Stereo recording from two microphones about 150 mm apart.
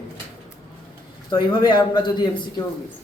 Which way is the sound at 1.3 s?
30° left (ahead or behind).